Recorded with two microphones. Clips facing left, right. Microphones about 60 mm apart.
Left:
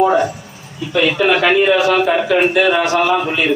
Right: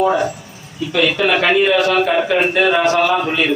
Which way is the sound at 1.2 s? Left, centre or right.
Centre.